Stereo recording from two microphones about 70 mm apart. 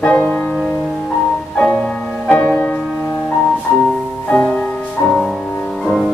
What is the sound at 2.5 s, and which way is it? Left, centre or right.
Music, left.